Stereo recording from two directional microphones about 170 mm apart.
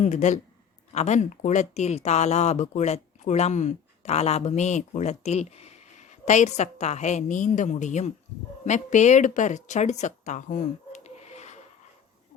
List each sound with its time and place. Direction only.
0.0 s speech: 45° left (ahead or behind)